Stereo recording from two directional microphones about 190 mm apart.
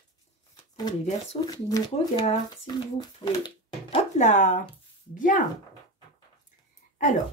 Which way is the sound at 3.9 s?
40° left (ahead or behind).